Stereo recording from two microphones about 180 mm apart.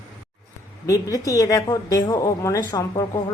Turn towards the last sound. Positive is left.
turn(degrees=20)  # may be behind; listen again after turning